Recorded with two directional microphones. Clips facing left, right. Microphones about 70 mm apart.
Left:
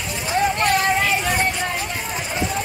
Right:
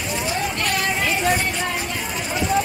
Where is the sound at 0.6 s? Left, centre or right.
Left.